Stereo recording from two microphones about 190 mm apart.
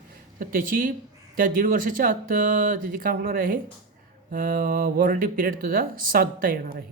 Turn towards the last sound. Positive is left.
turn(degrees=-50)  # may be behind; listen again after turning